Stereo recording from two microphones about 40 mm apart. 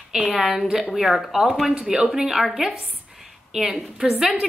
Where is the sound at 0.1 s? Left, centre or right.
Centre.